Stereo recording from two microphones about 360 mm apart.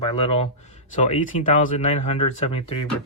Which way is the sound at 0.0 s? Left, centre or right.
Centre.